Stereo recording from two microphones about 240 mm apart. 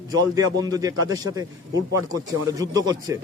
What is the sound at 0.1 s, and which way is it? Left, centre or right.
A man's voice, centre.